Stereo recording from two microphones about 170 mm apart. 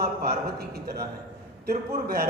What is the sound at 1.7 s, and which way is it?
Speech, 65° right (ahead or behind).